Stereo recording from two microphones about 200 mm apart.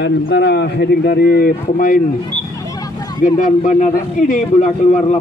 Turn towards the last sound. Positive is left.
turn(degrees=35)  # may be behind; listen again after turning